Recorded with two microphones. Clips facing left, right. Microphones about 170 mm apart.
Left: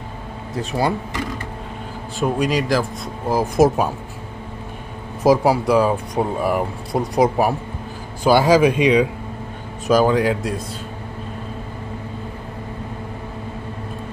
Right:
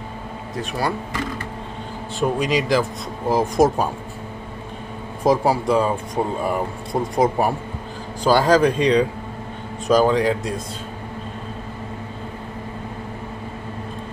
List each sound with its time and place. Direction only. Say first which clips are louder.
0.6 s speech: left 3 dB; 25° left (ahead or behind)
2.1 s speech: left 1 dB; centre (ahead or behind)
5.2 s speech: left 3 dB; 5° left (ahead or behind)